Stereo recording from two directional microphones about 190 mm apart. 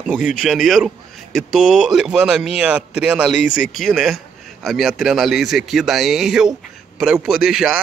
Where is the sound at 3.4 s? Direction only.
45° left (ahead or behind).